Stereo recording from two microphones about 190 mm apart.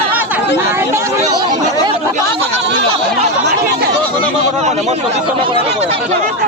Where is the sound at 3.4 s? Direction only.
60° right (ahead or behind).